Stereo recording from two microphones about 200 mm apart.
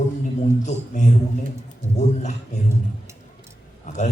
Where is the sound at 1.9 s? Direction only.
35° left (ahead or behind).